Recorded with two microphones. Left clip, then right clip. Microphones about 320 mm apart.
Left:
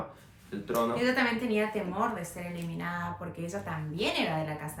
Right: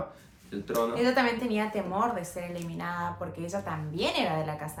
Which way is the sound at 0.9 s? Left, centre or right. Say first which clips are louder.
Right 4 dB; centre.